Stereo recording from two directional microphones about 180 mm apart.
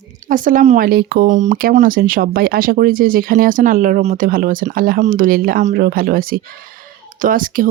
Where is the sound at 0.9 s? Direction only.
55° right (ahead or behind).